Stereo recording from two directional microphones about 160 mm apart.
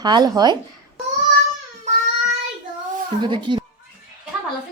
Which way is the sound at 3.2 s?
30° right (ahead or behind).